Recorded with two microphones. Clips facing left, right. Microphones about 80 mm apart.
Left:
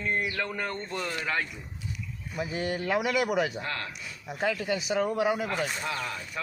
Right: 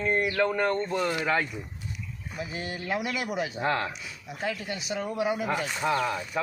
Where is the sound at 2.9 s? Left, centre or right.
Left.